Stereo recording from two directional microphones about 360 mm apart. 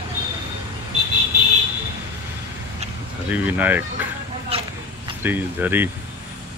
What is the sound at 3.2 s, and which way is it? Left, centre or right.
Speech, centre.